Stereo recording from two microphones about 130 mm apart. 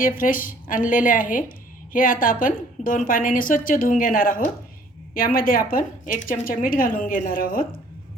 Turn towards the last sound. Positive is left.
turn(degrees=90)